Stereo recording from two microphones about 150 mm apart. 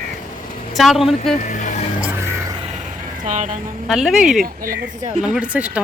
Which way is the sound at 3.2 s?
50° right (ahead or behind).